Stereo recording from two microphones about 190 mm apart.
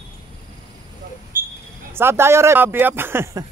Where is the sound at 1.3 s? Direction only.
50° right (ahead or behind).